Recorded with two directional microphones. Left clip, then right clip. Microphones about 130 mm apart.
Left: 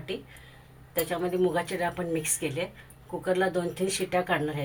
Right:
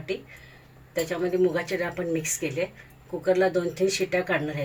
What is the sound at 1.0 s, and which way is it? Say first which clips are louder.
Speech: right 3 dB; 55° left (ahead or behind).